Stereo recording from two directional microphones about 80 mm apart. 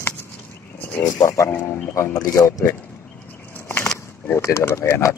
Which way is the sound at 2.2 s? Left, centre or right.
Left.